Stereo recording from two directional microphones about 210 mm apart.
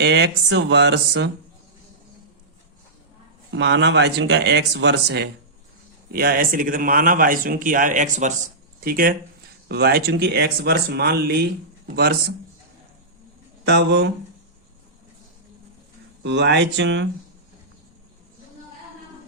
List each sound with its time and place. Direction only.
0.0 s speech: 55° right (ahead or behind)
3.5 s speech: 55° right (ahead or behind)
13.7 s speech: 55° right (ahead or behind)
16.2 s speech: 55° right (ahead or behind)